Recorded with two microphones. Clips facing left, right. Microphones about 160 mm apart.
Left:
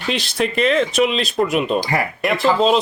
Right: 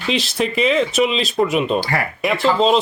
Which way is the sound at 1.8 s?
15° left (ahead or behind).